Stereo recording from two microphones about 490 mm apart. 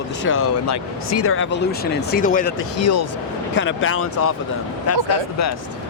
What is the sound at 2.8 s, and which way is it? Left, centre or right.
Speech, left.